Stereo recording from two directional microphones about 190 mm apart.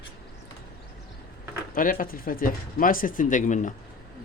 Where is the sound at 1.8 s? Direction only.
50° left (ahead or behind).